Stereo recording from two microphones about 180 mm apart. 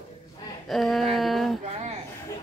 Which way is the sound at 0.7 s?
Centre (ahead or behind).